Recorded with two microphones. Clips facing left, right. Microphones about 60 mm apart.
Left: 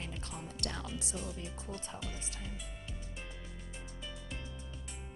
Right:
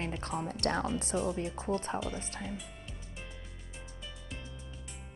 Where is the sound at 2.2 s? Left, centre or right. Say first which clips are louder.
Right 6 dB; right.